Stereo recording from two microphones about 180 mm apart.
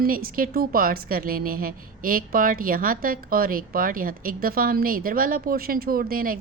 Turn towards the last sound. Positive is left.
turn(degrees=-50)  # may be behind; listen again after turning